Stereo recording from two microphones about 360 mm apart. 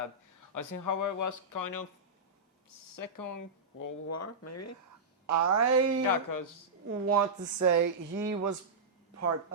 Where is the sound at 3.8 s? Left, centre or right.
Left.